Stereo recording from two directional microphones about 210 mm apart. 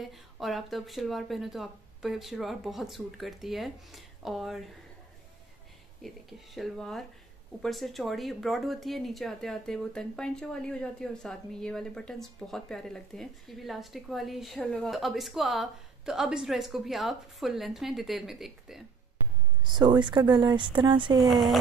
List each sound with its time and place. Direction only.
0.0 s speech: centre (ahead or behind)
6.0 s speech: centre (ahead or behind)
19.6 s speech: 20° right (ahead or behind)
21.2 s speech: centre (ahead or behind)